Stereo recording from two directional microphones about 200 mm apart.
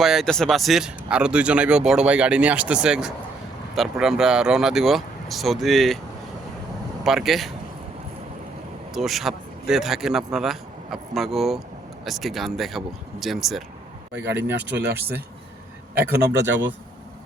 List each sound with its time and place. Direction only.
0.0 s speech: centre (ahead or behind)
7.0 s speech: centre (ahead or behind)
9.0 s speech: centre (ahead or behind)
14.7 s speech: 55° right (ahead or behind)